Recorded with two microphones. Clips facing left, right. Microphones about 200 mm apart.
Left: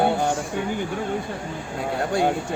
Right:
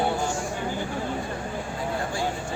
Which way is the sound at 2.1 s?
60° left (ahead or behind).